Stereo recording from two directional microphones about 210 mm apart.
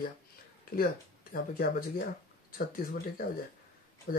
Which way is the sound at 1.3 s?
45° left (ahead or behind).